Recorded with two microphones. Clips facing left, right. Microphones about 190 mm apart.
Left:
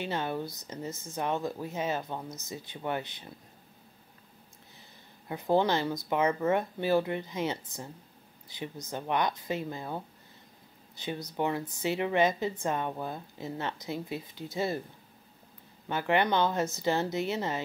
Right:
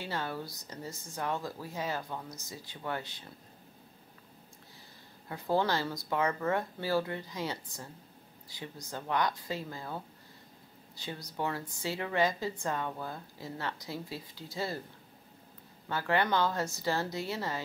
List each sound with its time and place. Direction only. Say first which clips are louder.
0.0 s a woman's voice: left 4 dB; 20° left (ahead or behind)
5.3 s a woman's voice: left 4 dB; 20° left (ahead or behind)
15.9 s a woman's voice: left 3 dB; 20° left (ahead or behind)